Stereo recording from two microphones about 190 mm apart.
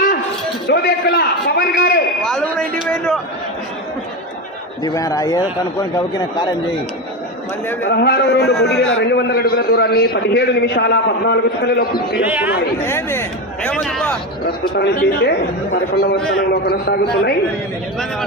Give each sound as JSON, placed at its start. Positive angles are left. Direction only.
{"t": 0.7, "sound": "a sound", "side_deg": 60}
{"t": 4.8, "sound": "speech", "side_deg": 20}
{"t": 7.9, "sound": "a man's voice", "side_deg": 60}
{"t": 8.5, "sound": "speech", "side_deg": 0}
{"t": 8.9, "sound": "a man's voice", "side_deg": 65}
{"t": 12.2, "sound": "speech", "side_deg": -10}
{"t": 12.8, "sound": "speech", "side_deg": 15}
{"t": 14.8, "sound": "a man's voice", "side_deg": 55}